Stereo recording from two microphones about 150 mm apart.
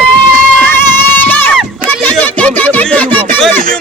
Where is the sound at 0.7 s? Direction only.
15° left (ahead or behind).